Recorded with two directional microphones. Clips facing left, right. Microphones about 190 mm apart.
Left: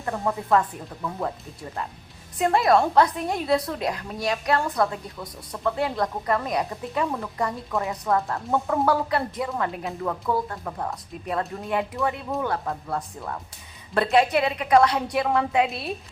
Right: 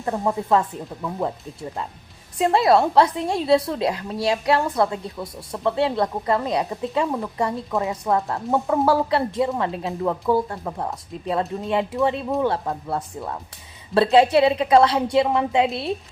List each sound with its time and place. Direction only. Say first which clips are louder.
0.0 s a woman's voice: right 4 dB; 25° right (ahead or behind)
2.4 s a woman's voice: right 2 dB; 25° right (ahead or behind)